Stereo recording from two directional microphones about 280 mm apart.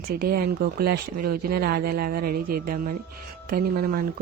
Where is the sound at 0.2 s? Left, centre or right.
Right.